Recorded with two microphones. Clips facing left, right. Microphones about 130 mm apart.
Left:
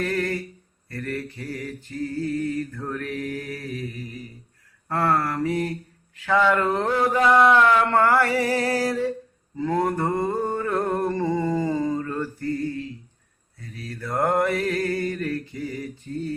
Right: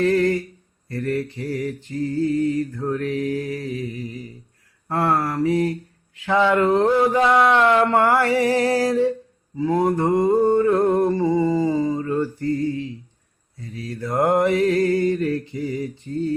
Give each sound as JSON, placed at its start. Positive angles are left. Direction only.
{"t": 0.0, "sound": "mantra", "side_deg": -25}
{"t": 4.9, "sound": "mantra", "side_deg": -20}
{"t": 9.6, "sound": "a sound", "side_deg": -10}
{"t": 13.6, "sound": "mantra", "side_deg": -20}